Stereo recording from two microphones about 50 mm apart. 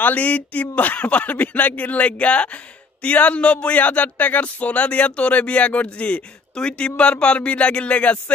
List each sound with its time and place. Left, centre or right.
0.0 s speech: left